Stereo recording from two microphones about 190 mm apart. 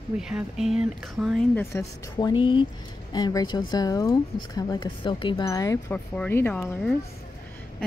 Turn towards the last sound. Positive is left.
turn(degrees=5)  # may be behind; listen again after turning